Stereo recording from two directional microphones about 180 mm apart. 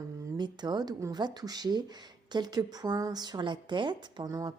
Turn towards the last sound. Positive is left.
turn(degrees=-20)  # may be behind; listen again after turning